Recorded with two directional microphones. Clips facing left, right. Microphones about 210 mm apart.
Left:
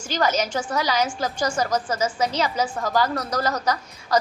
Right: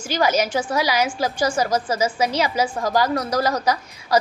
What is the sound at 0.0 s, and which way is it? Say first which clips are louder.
A woman's voice: right 3 dB; 10° right (ahead or behind).